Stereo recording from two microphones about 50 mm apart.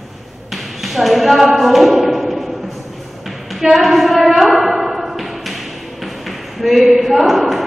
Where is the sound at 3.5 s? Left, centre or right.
Centre.